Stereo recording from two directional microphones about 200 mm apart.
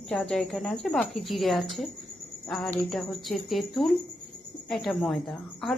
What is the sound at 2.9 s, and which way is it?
Speech, centre (ahead or behind).